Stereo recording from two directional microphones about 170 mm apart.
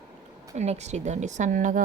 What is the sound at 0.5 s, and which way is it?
Speech, 40° right (ahead or behind).